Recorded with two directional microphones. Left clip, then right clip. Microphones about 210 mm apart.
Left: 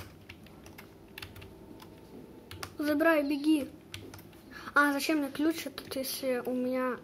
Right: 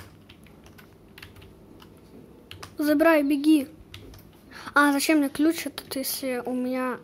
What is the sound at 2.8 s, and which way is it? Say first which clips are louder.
Speech: right 7 dB; 20° right (ahead or behind).